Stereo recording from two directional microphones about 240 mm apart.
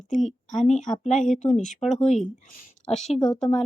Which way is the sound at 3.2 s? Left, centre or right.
Centre.